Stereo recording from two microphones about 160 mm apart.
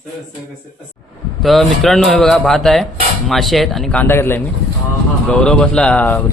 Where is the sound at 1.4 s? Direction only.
Centre (ahead or behind).